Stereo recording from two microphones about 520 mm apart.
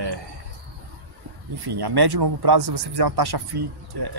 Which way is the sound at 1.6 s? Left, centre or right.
Right.